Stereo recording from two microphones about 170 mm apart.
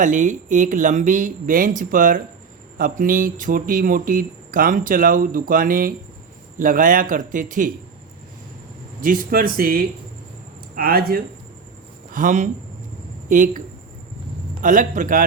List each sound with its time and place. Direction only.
0.0 s speech: 50° right (ahead or behind)
9.0 s speech: 55° right (ahead or behind)
12.1 s speech: 50° right (ahead or behind)
14.6 s speech: 50° right (ahead or behind)